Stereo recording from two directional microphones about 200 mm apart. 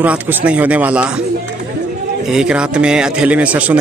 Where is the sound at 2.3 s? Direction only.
5° right (ahead or behind).